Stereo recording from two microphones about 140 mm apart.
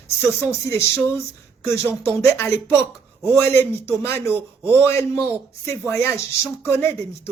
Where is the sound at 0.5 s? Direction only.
20° left (ahead or behind).